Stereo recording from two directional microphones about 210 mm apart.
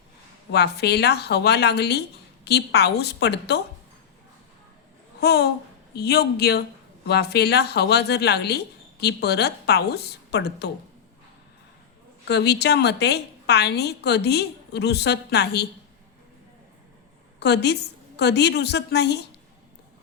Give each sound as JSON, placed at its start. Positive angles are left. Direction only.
{"t": 0.5, "sound": "speech", "side_deg": 50}
{"t": 5.2, "sound": "speech", "side_deg": 50}
{"t": 12.3, "sound": "speech", "side_deg": 50}
{"t": 17.4, "sound": "speech", "side_deg": 55}